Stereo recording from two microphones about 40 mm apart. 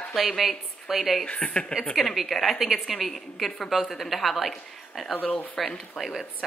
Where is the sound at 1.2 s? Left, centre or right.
Left.